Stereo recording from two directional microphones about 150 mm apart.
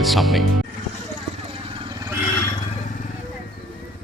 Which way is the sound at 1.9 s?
25° right (ahead or behind).